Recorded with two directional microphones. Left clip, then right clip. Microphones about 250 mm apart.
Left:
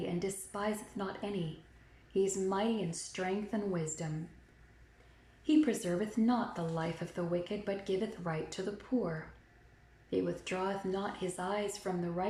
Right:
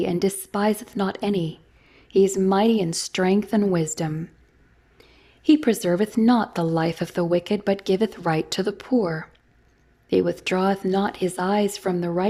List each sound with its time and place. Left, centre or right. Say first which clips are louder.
0.0 s speech: right 14 dB; right
5.5 s speech: right 11 dB; right